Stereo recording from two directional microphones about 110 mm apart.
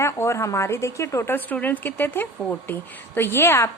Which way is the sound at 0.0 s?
25° left (ahead or behind).